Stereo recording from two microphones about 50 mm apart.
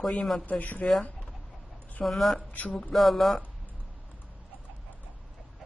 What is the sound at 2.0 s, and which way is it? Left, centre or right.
Speech, centre.